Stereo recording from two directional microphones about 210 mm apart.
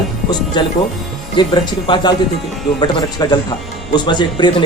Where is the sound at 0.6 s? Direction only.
20° left (ahead or behind).